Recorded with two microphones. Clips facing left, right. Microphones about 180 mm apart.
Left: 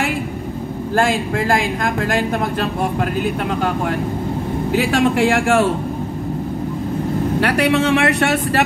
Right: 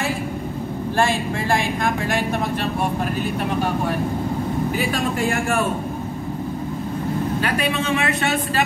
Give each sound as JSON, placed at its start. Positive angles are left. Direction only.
{"t": 4.7, "sound": "speech", "side_deg": 80}
{"t": 7.3, "sound": "speech", "side_deg": 75}